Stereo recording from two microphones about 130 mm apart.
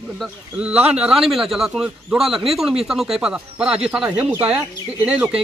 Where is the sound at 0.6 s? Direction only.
10° right (ahead or behind).